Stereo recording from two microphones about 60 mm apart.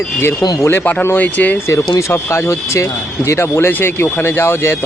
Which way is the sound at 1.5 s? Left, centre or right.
Left.